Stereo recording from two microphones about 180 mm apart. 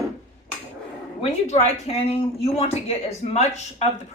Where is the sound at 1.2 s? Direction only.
35° left (ahead or behind).